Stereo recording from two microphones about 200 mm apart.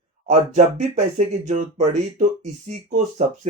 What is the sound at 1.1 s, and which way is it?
Speech, 35° right (ahead or behind).